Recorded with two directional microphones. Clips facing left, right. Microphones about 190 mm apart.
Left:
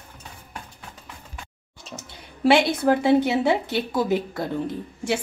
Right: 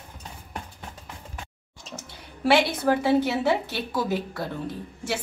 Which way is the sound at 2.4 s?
20° left (ahead or behind).